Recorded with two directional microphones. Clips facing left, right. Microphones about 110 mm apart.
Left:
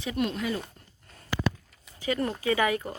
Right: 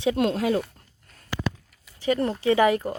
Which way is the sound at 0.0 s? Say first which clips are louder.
Right 7 dB; 90° right.